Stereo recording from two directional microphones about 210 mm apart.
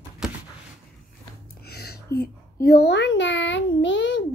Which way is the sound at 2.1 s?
50° left (ahead or behind).